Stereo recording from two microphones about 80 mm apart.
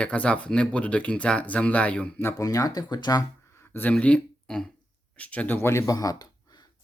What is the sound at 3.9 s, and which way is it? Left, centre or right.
Speech, centre.